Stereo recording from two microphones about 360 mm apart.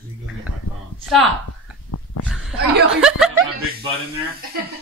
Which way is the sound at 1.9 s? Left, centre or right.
Left.